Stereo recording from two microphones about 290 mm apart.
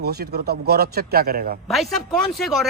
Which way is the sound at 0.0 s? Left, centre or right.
Right.